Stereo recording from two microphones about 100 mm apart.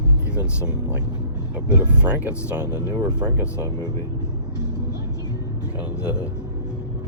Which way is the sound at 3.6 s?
40° right (ahead or behind).